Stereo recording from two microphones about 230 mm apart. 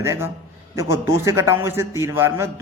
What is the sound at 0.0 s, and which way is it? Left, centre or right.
A man's voice, centre.